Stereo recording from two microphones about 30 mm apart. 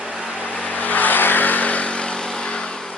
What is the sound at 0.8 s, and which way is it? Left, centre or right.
Vehicle, left.